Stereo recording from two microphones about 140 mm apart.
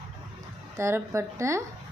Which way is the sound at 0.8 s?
20° right (ahead or behind).